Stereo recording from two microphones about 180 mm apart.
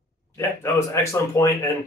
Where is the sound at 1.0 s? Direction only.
15° left (ahead or behind).